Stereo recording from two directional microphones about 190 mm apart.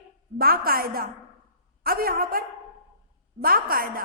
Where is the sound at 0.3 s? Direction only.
50° right (ahead or behind).